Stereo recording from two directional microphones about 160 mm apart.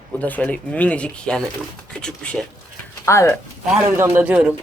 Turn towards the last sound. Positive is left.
turn(degrees=-10)  # may be behind; listen again after turning